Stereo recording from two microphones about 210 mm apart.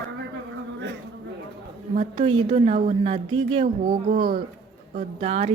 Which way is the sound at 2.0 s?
25° right (ahead or behind).